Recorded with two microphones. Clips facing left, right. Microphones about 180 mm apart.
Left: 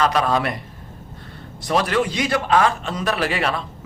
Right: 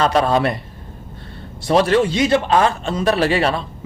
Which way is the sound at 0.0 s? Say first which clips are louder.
Right 3 dB; 30° right (ahead or behind).